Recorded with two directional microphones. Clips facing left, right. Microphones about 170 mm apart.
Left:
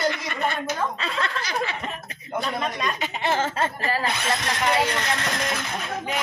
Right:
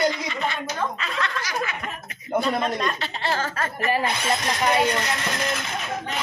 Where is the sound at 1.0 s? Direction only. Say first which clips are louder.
Even; 30° left (ahead or behind).